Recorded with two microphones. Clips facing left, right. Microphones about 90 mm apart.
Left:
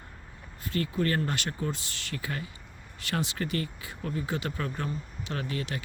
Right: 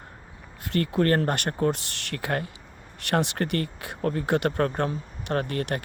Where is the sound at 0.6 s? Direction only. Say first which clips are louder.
Right 5 dB; 65° right (ahead or behind).